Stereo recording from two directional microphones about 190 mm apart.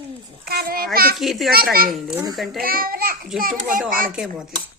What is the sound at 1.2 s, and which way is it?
Speech, centre (ahead or behind).